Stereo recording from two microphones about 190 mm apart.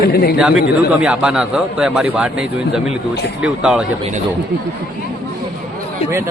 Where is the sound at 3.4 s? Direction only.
5° right (ahead or behind).